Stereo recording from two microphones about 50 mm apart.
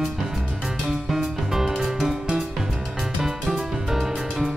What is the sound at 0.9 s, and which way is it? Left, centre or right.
Music, centre.